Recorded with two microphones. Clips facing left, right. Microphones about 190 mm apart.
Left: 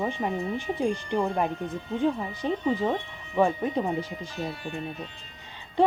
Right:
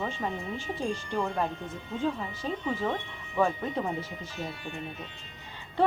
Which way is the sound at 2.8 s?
30° left (ahead or behind).